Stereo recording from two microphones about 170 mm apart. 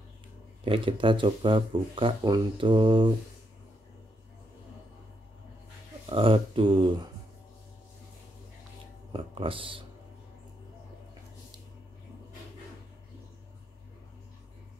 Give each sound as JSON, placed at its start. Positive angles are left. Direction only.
{"t": 0.7, "sound": "speech", "side_deg": -30}
{"t": 6.0, "sound": "speech", "side_deg": -30}
{"t": 9.1, "sound": "speech", "side_deg": -30}